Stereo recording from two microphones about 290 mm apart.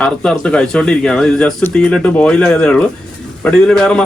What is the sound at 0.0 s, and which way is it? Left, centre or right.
Speech, centre.